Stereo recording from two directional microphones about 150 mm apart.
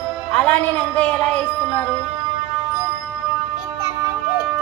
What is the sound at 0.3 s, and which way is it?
A man's voice, 10° left (ahead or behind).